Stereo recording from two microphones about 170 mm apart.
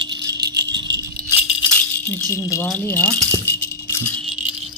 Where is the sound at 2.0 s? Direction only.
10° left (ahead or behind).